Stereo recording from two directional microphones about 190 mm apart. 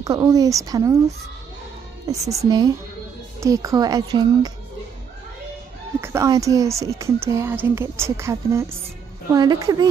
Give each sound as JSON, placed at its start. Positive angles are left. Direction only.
{"t": 0.0, "sound": "speech", "side_deg": -20}
{"t": 5.9, "sound": "a woman's voice", "side_deg": -15}